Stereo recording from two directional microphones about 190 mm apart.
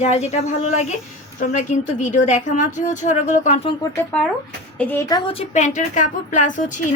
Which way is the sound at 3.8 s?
15° left (ahead or behind).